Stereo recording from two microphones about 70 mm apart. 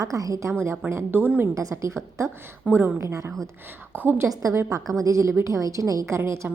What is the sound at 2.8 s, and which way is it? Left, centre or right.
Speech, right.